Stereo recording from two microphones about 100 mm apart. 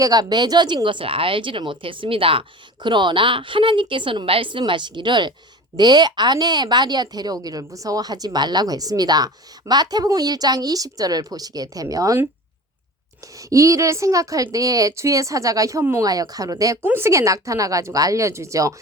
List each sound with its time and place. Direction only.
0.0 s a woman's voice: 40° right (ahead or behind)
13.5 s a woman's voice: 30° right (ahead or behind)
15.8 s speech: 25° right (ahead or behind)
16.0 s a woman's voice: 40° right (ahead or behind)
16.8 s a woman's voice: 25° right (ahead or behind)